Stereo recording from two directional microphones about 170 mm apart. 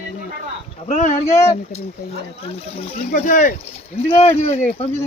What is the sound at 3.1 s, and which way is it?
Speech, 55° left (ahead or behind).